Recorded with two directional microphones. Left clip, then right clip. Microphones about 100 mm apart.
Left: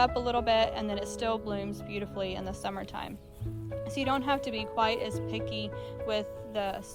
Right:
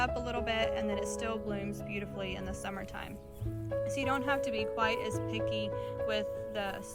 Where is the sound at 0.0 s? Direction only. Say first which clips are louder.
Left 6 dB; 55° left (ahead or behind).